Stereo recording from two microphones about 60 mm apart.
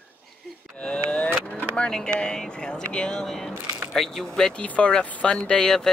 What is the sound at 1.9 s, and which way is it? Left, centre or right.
Speech, centre.